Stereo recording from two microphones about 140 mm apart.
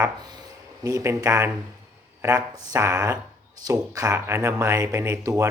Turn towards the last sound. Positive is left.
turn(degrees=-20)  # may be behind; listen again after turning